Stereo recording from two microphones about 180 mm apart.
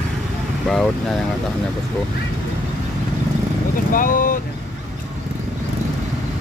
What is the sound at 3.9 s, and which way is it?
Speech, 50° left (ahead or behind).